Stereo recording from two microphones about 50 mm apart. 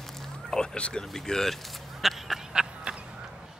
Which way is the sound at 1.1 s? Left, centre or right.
Centre.